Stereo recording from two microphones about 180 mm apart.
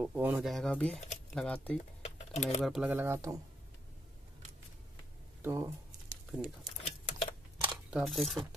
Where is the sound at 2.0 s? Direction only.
35° left (ahead or behind).